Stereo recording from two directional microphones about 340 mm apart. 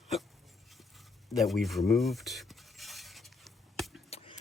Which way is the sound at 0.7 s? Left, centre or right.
Centre.